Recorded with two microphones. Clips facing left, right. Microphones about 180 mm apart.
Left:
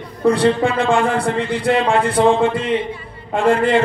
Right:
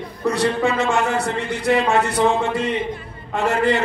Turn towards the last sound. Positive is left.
turn(degrees=50)  # may be behind; listen again after turning